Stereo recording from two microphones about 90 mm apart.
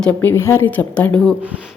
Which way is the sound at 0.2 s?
25° left (ahead or behind).